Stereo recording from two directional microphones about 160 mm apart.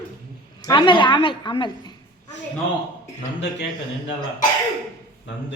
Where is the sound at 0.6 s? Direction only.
30° left (ahead or behind).